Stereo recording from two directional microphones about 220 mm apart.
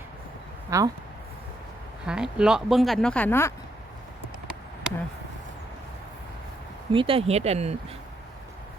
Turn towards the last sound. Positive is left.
turn(degrees=-30)  # may be behind; listen again after turning